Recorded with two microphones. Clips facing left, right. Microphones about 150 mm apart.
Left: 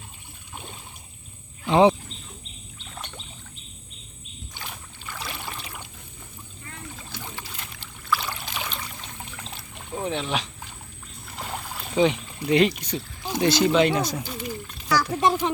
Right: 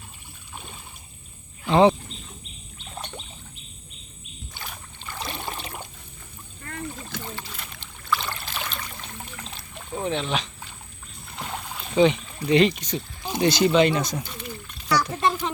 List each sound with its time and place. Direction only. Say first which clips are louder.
1.6 s speech: even; 15° left (ahead or behind)
5.1 s boat: right 3 dB; 25° right (ahead or behind)
7.3 s boat: right 1 dB; 10° left (ahead or behind)
9.6 s a sound: even; 10° left (ahead or behind)
11.3 s rowboat: even; 5° left (ahead or behind)
13.3 s speech: right 1 dB; centre (ahead or behind)
14.8 s a sound: even; centre (ahead or behind)
15.2 s a child's voice: left 3 dB; 15° left (ahead or behind)